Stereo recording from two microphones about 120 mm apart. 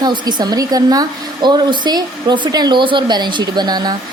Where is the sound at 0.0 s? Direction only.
35° right (ahead or behind).